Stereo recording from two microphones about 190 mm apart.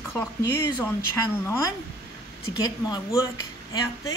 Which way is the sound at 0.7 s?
15° left (ahead or behind).